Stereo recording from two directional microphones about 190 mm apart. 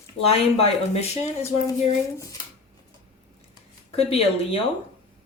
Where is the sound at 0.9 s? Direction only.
35° left (ahead or behind).